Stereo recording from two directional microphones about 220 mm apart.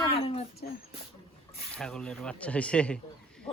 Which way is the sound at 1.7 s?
5° left (ahead or behind).